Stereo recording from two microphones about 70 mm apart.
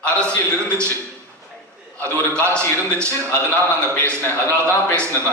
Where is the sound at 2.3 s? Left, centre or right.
Right.